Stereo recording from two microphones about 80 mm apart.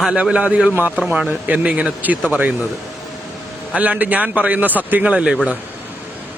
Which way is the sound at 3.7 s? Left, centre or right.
Centre.